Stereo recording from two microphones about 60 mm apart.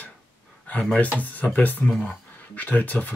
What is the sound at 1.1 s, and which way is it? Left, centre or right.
Speech, left.